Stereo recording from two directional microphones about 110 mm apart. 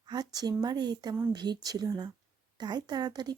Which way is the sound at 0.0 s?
40° right (ahead or behind).